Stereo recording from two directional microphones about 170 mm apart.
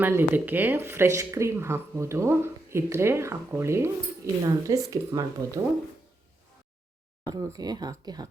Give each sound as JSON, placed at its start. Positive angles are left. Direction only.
{"t": 0.0, "sound": "speech", "side_deg": -10}
{"t": 7.3, "sound": "speech", "side_deg": -25}